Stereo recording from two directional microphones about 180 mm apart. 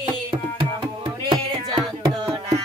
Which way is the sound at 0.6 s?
25° right (ahead or behind).